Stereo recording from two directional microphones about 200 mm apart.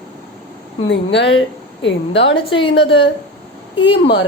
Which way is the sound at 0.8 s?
60° left (ahead or behind).